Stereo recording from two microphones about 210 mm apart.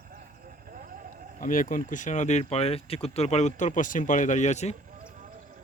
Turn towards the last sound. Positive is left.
turn(degrees=35)  # may be behind; listen again after turning